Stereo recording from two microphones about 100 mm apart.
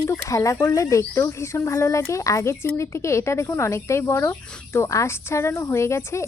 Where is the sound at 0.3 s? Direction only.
30° left (ahead or behind).